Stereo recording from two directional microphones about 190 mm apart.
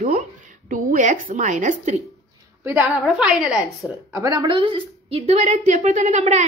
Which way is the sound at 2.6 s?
15° right (ahead or behind).